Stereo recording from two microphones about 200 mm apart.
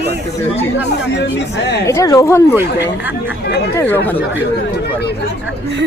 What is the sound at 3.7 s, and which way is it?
Speech, 10° left (ahead or behind).